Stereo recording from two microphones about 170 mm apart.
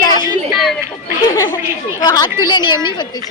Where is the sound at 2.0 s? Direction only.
25° left (ahead or behind).